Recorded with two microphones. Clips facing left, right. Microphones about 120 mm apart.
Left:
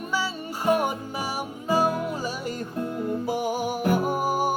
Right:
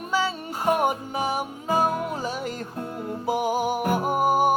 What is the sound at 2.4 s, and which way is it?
Music, centre (ahead or behind).